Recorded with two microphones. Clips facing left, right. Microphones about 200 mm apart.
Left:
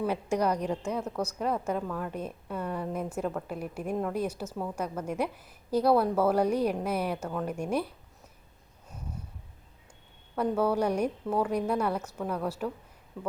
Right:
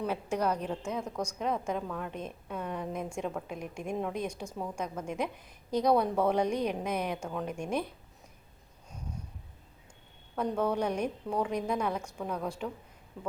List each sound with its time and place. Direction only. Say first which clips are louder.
0.0 s a woman's voice: left 3 dB; 10° left (ahead or behind)
10.3 s a woman's voice: left 3 dB; 5° left (ahead or behind)